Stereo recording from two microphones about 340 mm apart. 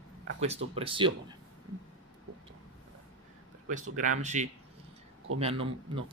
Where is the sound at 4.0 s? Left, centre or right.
Right.